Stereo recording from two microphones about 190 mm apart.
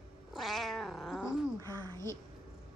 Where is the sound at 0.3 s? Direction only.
Centre (ahead or behind).